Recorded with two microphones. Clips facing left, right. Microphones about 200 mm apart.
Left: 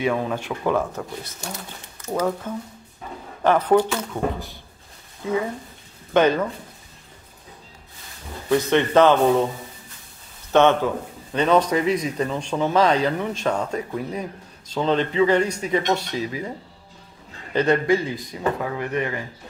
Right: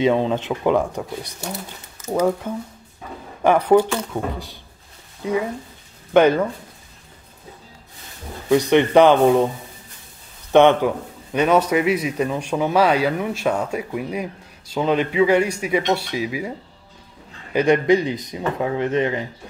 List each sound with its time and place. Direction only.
0.0 s speech: 25° right (ahead or behind)
8.5 s speech: 15° right (ahead or behind)
10.5 s speech: 15° right (ahead or behind)